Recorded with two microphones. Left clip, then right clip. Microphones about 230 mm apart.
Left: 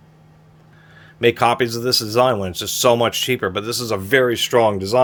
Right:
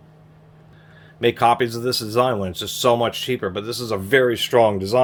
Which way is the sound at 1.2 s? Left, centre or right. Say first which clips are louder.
Left 1 dB; left.